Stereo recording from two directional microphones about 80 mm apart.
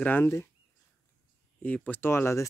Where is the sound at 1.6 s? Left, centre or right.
Centre.